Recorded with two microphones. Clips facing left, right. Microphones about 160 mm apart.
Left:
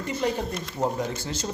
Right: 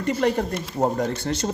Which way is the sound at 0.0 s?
60° right (ahead or behind).